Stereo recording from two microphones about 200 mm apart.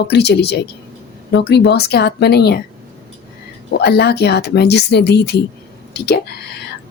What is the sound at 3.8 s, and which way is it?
Speech, 55° left (ahead or behind).